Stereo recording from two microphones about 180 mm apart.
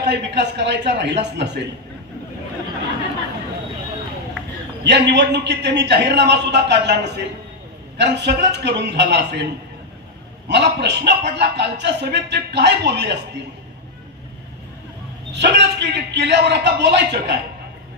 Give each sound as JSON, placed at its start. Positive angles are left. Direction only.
{"t": 0.1, "sound": "a man's voice", "side_deg": -75}
{"t": 4.8, "sound": "a man's voice", "side_deg": -70}
{"t": 10.5, "sound": "a man's voice", "side_deg": -70}
{"t": 15.3, "sound": "a man's voice", "side_deg": -70}